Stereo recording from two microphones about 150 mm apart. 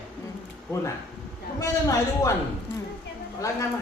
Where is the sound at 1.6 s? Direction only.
20° left (ahead or behind).